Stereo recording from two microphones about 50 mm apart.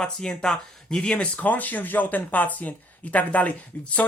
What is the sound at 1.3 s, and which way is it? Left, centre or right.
Speech, left.